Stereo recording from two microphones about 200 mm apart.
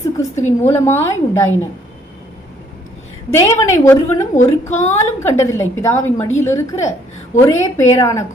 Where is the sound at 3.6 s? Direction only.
15° left (ahead or behind).